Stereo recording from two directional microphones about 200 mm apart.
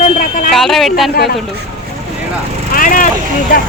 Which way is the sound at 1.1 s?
50° left (ahead or behind).